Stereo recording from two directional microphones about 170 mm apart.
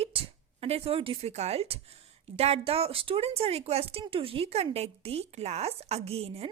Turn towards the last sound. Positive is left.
turn(degrees=-35)  # may be behind; listen again after turning